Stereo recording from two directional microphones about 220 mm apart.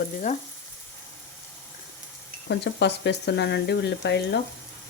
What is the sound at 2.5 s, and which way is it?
Speech, 50° left (ahead or behind).